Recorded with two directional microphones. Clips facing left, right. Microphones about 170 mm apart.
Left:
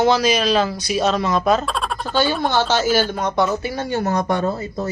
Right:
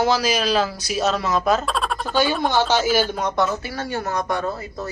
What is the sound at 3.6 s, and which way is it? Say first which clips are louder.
Speech: left 5 dB; 20° left (ahead or behind).